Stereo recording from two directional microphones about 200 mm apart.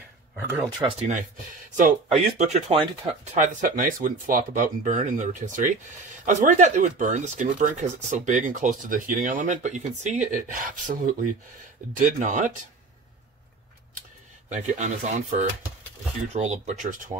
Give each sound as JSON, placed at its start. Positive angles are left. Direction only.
{"t": 0.5, "sound": "speech", "side_deg": -10}
{"t": 1.8, "sound": "speech", "side_deg": -35}
{"t": 14.7, "sound": "speech", "side_deg": -35}